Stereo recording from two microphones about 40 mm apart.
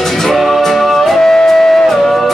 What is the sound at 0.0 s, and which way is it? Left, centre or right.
Music, centre.